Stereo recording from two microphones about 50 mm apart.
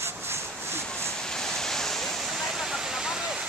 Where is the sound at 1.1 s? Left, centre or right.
Centre.